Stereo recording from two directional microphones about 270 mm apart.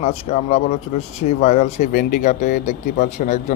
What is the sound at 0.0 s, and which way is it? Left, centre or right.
Speech, left.